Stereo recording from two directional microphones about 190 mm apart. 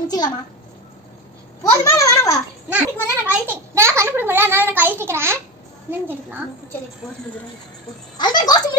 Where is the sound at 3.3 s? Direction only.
10° right (ahead or behind).